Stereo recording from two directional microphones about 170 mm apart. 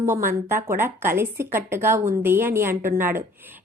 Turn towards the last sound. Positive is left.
turn(degrees=-10)  # may be behind; listen again after turning